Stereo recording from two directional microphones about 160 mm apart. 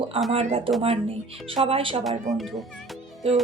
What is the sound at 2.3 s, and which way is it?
Speech, centre (ahead or behind).